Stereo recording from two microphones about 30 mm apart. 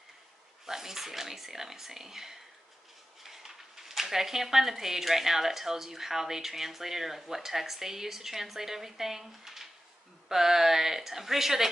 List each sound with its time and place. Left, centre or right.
0.7 s speech: centre